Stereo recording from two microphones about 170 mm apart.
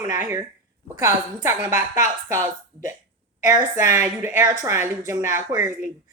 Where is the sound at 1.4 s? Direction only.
15° right (ahead or behind).